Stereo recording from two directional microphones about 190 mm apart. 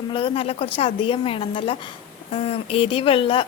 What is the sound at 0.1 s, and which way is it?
A woman's voice, 30° left (ahead or behind).